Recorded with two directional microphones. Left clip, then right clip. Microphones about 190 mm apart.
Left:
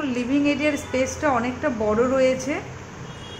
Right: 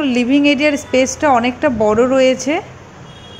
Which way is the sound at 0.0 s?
35° right (ahead or behind).